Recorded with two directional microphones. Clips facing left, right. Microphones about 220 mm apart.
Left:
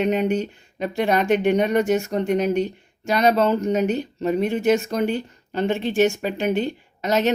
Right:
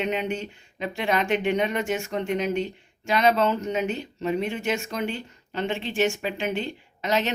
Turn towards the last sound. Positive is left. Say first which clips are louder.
# left 5 dB
turn(degrees=40)  # may be behind; listen again after turning